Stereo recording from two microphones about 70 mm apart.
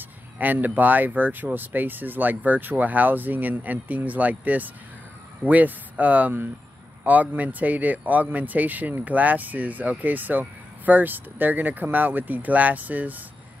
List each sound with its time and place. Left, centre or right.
0.4 s speech: right